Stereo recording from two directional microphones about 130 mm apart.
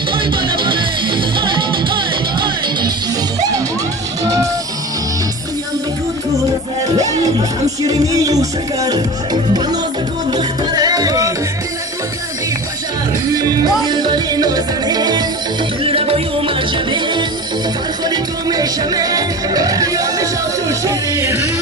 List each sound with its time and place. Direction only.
0.1 s music: 40° right (ahead or behind)
4.2 s music: 25° right (ahead or behind)
7.0 s music: 25° right (ahead or behind)
13.3 s music: 30° right (ahead or behind)
15.8 s music: 45° right (ahead or behind); by 21.4 s 20° right (ahead or behind)